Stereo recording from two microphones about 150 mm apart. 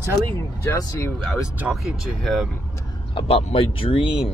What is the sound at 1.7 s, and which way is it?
Speech, 10° right (ahead or behind).